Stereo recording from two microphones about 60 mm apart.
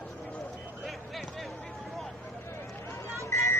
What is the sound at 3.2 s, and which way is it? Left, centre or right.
Vehicle, left.